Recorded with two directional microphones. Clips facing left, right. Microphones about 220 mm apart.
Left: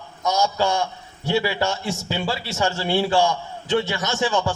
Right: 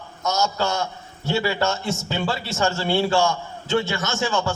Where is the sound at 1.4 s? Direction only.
10° left (ahead or behind).